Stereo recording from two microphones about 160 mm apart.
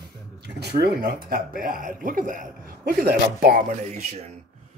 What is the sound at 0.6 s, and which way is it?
Speech, 90° right.